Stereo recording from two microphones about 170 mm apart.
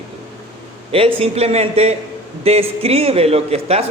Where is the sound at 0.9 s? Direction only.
35° right (ahead or behind).